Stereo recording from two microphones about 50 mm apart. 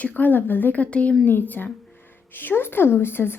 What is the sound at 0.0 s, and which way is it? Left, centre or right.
Speech, left.